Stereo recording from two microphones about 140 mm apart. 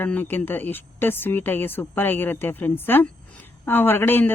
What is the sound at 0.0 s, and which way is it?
Speech, 15° left (ahead or behind).